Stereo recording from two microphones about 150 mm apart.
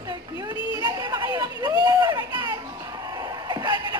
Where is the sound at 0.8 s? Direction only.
25° right (ahead or behind).